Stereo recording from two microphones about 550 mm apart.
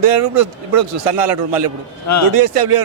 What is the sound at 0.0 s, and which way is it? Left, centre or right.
A man's voice, right.